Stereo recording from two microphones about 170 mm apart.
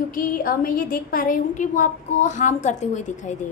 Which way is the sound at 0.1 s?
55° left (ahead or behind).